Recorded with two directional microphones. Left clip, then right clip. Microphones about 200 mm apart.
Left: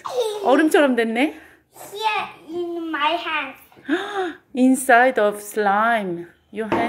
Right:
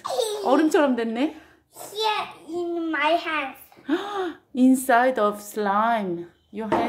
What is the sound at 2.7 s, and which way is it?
Speech, 25° right (ahead or behind).